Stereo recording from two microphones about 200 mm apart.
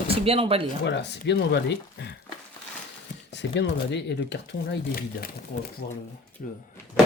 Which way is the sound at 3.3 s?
60° left (ahead or behind).